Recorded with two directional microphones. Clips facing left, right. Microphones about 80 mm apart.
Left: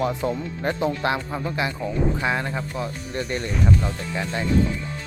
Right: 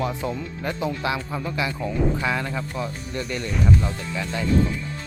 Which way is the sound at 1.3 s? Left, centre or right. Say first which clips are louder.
Left 1 dB; centre.